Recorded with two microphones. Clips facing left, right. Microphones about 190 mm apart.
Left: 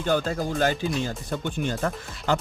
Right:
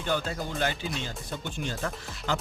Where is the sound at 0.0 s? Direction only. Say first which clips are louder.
Left 6 dB; 40° left (ahead or behind).